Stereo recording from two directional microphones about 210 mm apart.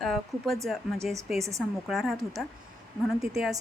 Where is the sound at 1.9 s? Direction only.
Centre (ahead or behind).